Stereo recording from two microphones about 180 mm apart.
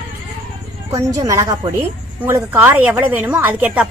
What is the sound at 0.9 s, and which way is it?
A woman's voice, 20° right (ahead or behind).